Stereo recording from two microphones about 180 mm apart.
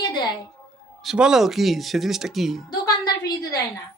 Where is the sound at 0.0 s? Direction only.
25° left (ahead or behind).